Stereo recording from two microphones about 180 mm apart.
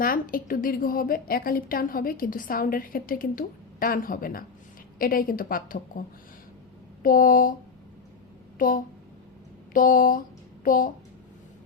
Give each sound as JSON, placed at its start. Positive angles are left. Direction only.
{"t": 0.0, "sound": "a woman's voice", "side_deg": 50}
{"t": 7.0, "sound": "a woman's voice", "side_deg": 50}
{"t": 8.5, "sound": "a woman's voice", "side_deg": 50}